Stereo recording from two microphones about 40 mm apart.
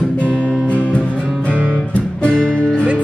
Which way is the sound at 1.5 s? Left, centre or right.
Right.